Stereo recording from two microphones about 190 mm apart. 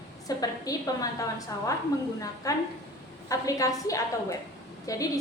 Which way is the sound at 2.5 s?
15° left (ahead or behind).